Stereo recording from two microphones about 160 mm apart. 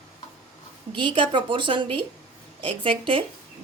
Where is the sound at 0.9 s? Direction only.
30° right (ahead or behind).